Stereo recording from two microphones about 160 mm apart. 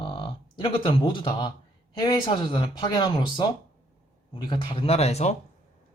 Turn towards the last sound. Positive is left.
turn(degrees=40)  # may be behind; listen again after turning